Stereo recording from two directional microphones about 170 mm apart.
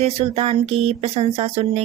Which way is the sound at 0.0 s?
35° right (ahead or behind).